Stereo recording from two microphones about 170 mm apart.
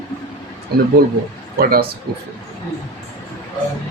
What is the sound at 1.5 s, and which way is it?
Speech, 60° right (ahead or behind).